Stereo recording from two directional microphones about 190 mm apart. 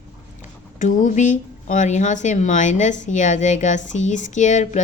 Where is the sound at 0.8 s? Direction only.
40° left (ahead or behind).